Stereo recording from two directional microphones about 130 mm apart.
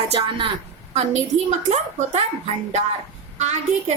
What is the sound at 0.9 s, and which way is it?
A woman's voice, 60° right (ahead or behind).